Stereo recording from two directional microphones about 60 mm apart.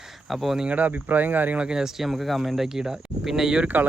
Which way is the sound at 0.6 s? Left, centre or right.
Right.